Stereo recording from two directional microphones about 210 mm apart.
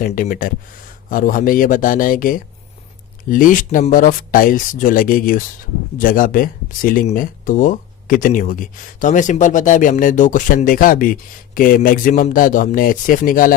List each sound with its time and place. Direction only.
0.0 s speech: 40° left (ahead or behind)